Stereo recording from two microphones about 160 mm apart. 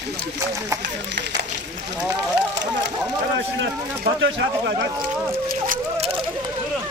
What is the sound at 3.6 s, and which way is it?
Speech, 90° right.